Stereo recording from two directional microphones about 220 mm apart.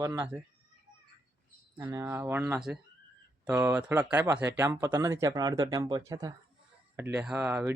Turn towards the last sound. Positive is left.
turn(degrees=-10)  # may be behind; listen again after turning